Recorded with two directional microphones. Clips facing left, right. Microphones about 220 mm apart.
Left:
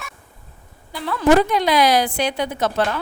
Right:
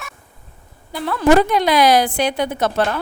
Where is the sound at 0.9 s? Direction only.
55° right (ahead or behind).